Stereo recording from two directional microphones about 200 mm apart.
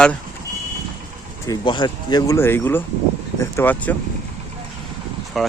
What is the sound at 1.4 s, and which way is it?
Speech, 20° left (ahead or behind).